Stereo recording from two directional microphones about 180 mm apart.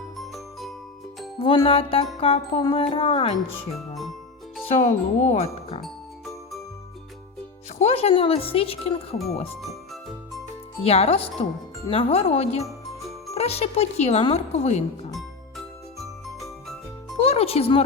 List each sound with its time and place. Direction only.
0.2 s music: centre (ahead or behind)
1.4 s speech: 30° left (ahead or behind)
4.8 s speech: 40° left (ahead or behind)
5.8 s music: centre (ahead or behind)
7.8 s speech: 35° left (ahead or behind)
9.6 s music: centre (ahead or behind)
10.8 s speech: 35° left (ahead or behind)
12.6 s jingle: centre (ahead or behind)
13.3 s speech: 35° left (ahead or behind)
15.1 s music: centre (ahead or behind)
17.2 s music: 35° left (ahead or behind)